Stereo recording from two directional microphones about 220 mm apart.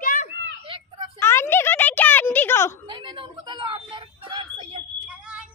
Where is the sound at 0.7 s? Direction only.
20° right (ahead or behind).